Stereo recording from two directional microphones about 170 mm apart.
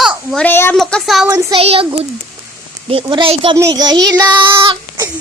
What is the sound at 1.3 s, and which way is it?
Child singing, 20° right (ahead or behind).